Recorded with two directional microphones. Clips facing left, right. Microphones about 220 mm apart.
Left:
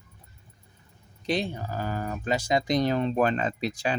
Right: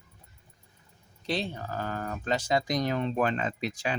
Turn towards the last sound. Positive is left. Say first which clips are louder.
# left 3 dB
turn(degrees=35)  # may be behind; listen again after turning